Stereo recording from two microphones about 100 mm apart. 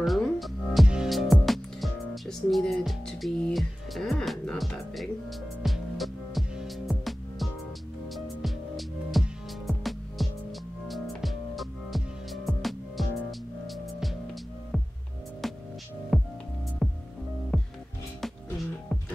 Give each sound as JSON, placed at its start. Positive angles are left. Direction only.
{"t": 0.0, "sound": "music", "side_deg": 0}
{"t": 15.4, "sound": "music", "side_deg": 0}